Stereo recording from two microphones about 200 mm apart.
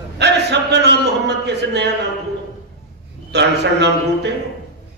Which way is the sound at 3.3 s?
60° right (ahead or behind).